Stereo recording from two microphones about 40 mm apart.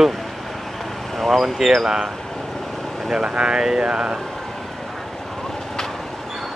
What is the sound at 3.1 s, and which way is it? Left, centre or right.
Speech, right.